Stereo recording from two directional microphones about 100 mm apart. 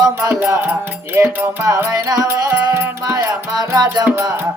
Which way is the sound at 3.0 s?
40° right (ahead or behind).